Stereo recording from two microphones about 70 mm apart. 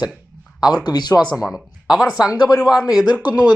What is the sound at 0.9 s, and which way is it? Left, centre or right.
Speech, left.